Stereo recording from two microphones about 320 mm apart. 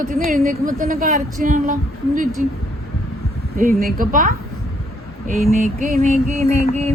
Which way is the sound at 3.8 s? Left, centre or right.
Right.